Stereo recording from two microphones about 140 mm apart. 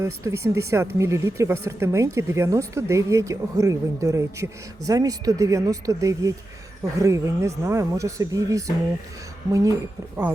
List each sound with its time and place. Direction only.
0.0 s a woman's voice: 20° right (ahead or behind)